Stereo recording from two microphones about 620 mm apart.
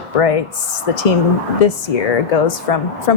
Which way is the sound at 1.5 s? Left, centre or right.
Left.